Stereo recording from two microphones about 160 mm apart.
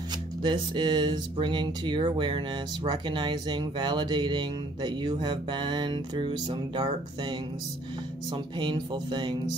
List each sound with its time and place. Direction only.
0.4 s speech: 30° right (ahead or behind)